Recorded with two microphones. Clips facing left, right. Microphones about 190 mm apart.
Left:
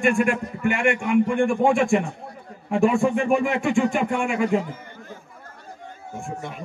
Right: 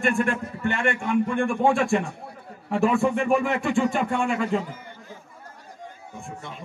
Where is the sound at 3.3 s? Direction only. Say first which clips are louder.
Left 2 dB; 15° left (ahead or behind).